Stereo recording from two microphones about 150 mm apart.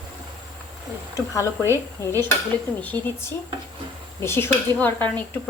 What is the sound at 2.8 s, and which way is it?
A woman's voice, 10° left (ahead or behind).